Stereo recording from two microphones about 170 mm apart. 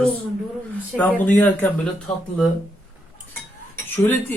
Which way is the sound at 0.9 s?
10° left (ahead or behind).